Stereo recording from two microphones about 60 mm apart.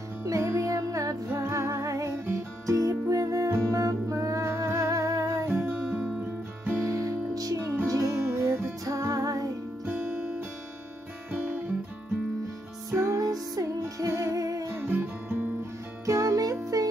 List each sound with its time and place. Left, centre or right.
0.2 s music: right
0.7 s music: right
1.3 s music: right
4.5 s humming: right
4.7 s music: right
5.6 s music: right
6.8 s music: right
7.8 s music: right
9.8 s music: right
12.9 s music: right
13.3 s music: right
14.9 s guitar: right
16.1 s music: right